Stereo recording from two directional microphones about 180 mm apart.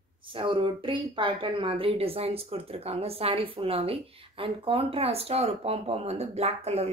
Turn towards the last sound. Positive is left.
turn(degrees=-35)  # may be behind; listen again after turning